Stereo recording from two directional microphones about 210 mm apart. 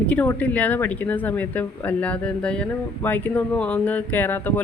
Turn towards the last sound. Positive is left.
turn(degrees=10)  # may be behind; listen again after turning